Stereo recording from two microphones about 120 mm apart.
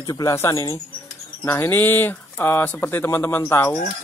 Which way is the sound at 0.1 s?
25° left (ahead or behind).